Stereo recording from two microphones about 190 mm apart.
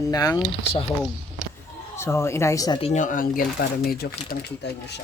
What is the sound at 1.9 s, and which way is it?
Speech, 15° left (ahead or behind).